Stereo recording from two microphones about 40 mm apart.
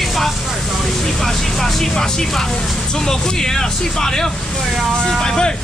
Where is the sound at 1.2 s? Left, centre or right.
Centre.